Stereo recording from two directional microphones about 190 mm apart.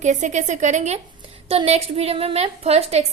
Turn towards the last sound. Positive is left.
turn(degrees=-30)  # may be behind; listen again after turning